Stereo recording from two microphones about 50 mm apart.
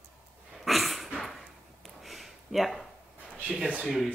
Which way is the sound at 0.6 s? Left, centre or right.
Centre.